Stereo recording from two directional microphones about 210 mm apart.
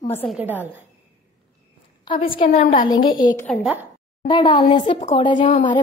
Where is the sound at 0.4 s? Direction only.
10° right (ahead or behind).